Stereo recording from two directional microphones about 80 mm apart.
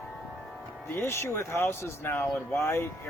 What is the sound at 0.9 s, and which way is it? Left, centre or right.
Speech, left.